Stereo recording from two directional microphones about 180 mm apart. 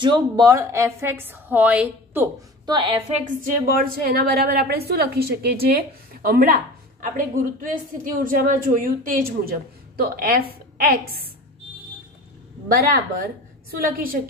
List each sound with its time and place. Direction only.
0.0 s a woman's voice: 25° right (ahead or behind); by 2.2 s 10° right (ahead or behind)
2.6 s a woman's voice: 25° right (ahead or behind)
3.3 s a woman's voice: 50° right (ahead or behind)
12.6 s a woman's voice: 60° right (ahead or behind)